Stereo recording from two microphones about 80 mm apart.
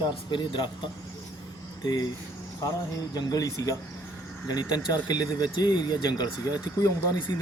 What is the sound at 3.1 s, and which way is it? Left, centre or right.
Speech, left.